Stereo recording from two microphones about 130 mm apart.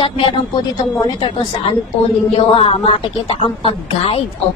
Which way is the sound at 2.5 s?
45° left (ahead or behind).